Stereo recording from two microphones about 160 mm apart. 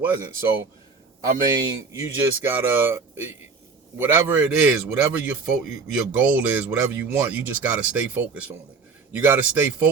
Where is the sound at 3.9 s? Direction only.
15° right (ahead or behind).